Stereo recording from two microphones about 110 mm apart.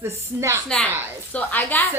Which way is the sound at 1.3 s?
15° left (ahead or behind).